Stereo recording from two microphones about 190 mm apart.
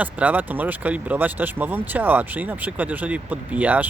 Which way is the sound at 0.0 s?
10° right (ahead or behind).